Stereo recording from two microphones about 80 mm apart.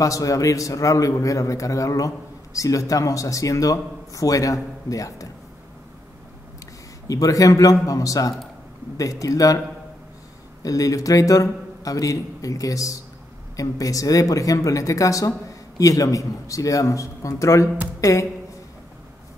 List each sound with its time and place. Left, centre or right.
0.0 s a man's voice: left
7.1 s a man's voice: left
10.6 s a man's voice: left